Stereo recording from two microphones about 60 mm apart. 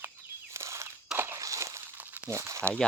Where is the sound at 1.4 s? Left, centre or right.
Right.